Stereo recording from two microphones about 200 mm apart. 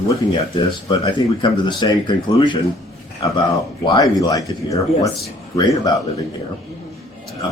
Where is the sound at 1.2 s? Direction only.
25° left (ahead or behind).